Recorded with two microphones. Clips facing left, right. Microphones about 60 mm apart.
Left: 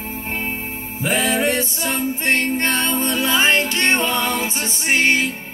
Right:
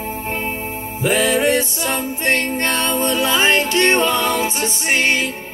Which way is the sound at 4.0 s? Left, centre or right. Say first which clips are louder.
Right 3 dB; left.